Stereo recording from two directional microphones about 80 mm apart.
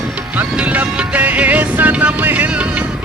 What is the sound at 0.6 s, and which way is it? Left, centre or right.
Music, centre.